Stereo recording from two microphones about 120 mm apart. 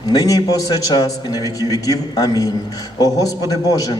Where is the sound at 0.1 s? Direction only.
30° left (ahead or behind).